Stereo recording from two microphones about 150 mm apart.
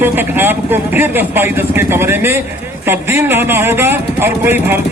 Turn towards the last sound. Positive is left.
turn(degrees=-15)  # may be behind; listen again after turning